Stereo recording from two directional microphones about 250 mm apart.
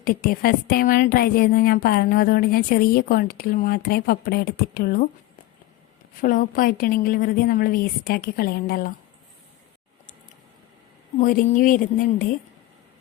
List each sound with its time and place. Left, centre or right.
0.0 s a woman's voice: left
6.2 s a woman's voice: left
11.2 s a woman's voice: left